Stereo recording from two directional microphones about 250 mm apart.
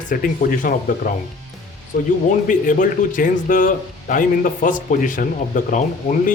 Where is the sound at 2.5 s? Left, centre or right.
Left.